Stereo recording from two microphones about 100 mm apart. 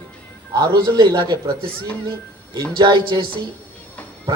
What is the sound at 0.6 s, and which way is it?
Speech, 45° right (ahead or behind).